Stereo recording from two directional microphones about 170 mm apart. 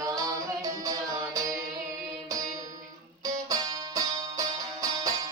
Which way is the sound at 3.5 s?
20° right (ahead or behind).